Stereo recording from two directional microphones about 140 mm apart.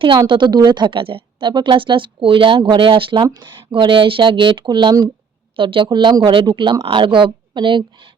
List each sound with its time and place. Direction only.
0.3 s speech: 35° right (ahead or behind)